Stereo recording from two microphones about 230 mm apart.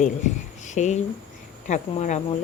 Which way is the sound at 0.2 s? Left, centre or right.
Left.